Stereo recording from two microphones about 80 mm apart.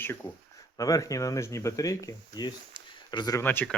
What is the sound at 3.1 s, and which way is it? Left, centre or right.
Speech, left.